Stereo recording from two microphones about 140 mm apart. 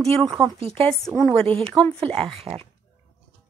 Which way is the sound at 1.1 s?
15° left (ahead or behind).